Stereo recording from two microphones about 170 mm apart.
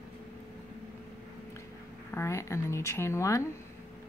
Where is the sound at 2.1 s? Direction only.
15° left (ahead or behind).